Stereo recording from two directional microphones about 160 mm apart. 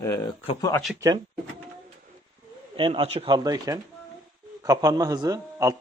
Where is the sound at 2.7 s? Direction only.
35° right (ahead or behind).